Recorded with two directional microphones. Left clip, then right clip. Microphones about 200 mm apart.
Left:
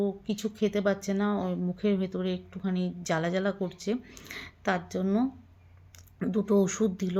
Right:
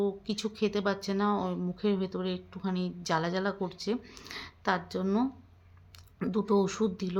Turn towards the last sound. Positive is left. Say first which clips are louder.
# left 2 dB
turn(degrees=10)  # may be behind; listen again after turning